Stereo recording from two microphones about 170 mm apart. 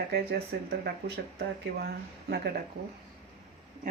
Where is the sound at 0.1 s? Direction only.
70° right (ahead or behind).